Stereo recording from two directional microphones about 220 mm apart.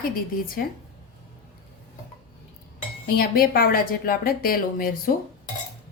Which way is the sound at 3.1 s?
45° left (ahead or behind).